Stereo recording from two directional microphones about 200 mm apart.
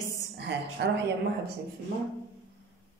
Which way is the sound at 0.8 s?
60° right (ahead or behind).